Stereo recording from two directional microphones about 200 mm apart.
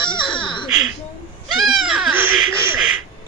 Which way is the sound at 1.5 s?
Centre (ahead or behind).